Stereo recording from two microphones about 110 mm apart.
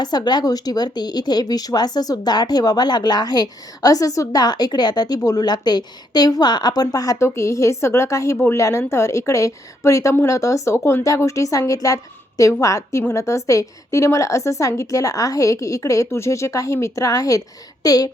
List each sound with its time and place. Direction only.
0.0 s a woman's voice: 40° left (ahead or behind)